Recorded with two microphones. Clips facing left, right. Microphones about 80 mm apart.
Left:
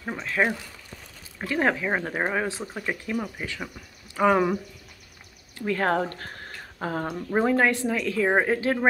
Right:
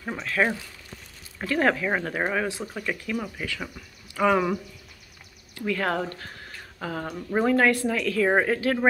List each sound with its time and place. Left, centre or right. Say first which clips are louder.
0.0 s zipper: even; centre
1.4 s speech: right 1 dB; centre
5.7 s speech: left 2 dB; left
7.2 s speech: right 1 dB; centre